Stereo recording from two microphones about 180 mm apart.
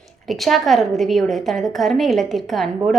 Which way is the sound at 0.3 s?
Centre (ahead or behind).